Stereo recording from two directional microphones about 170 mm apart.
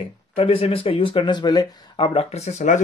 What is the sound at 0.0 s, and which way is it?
Speech, 35° left (ahead or behind).